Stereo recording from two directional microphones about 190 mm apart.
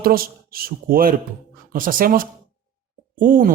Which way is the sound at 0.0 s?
50° right (ahead or behind).